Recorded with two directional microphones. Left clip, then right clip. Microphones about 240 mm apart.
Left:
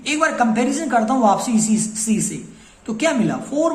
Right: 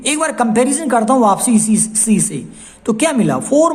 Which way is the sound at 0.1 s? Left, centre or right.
Right.